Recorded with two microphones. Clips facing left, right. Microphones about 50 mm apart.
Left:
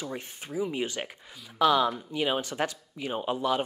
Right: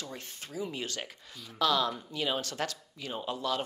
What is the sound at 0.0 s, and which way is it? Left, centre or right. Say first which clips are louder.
Speech: left 6 dB; centre.